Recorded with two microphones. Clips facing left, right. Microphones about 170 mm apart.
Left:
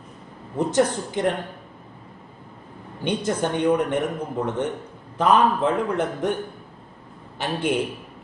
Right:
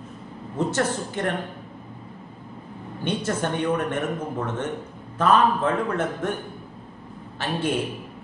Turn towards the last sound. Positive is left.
turn(degrees=15)  # may be behind; listen again after turning